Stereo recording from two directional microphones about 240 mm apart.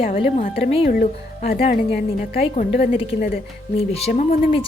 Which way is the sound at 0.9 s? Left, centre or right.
Left.